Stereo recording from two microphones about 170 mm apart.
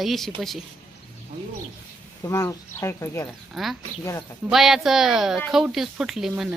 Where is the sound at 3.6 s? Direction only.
Centre (ahead or behind).